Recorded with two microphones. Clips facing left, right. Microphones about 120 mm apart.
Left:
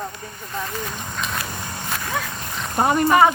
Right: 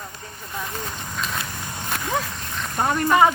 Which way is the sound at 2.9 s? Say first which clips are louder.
Left 2 dB; 10° left (ahead or behind).